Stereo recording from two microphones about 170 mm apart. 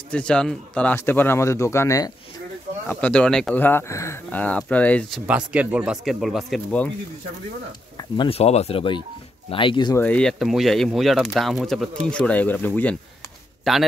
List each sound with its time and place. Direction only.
0.1 s speech: 5° left (ahead or behind)
2.9 s speech: 5° left (ahead or behind)
5.2 s speech: 10° right (ahead or behind)
8.0 s speech: 30° left (ahead or behind)
9.9 s speech: 10° left (ahead or behind)